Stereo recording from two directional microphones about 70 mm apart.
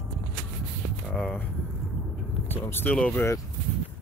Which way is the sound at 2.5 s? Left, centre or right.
Left.